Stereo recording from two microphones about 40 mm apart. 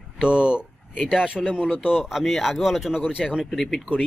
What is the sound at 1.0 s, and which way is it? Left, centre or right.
Speech, centre.